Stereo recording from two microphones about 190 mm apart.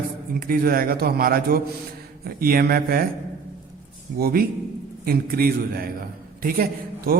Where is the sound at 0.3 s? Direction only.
50° right (ahead or behind).